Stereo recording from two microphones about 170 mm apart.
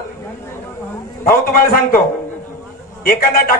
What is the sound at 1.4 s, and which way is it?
Speech, 60° left (ahead or behind).